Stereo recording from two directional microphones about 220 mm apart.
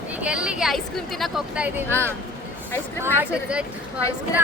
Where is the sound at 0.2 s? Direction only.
5° right (ahead or behind).